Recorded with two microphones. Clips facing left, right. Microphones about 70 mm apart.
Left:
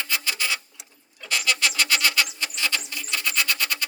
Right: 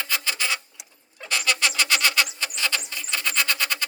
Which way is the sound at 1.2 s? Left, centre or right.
Right.